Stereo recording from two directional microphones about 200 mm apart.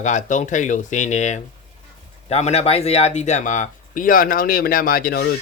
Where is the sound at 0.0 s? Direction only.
35° left (ahead or behind).